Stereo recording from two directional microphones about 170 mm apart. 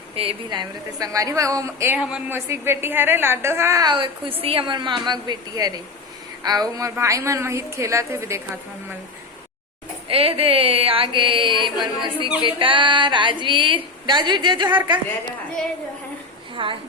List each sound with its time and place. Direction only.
0.2 s a woman's voice: 30° right (ahead or behind)
2.0 s a man's voice: 5° right (ahead or behind)
10.1 s mantra: 35° right (ahead or behind)
12.4 s a woman's voice: 30° right (ahead or behind)
16.6 s a woman's voice: 30° right (ahead or behind)